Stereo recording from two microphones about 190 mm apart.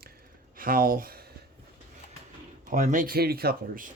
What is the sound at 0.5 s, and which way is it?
Speech, 50° right (ahead or behind).